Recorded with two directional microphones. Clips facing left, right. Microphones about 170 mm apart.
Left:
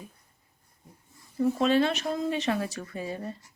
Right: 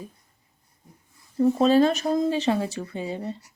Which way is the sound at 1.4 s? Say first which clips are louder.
Right 5 dB; 35° right (ahead or behind).